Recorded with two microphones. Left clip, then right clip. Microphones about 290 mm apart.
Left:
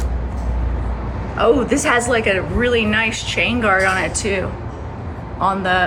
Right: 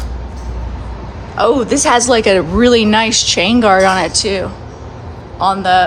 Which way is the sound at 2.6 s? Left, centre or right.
Right.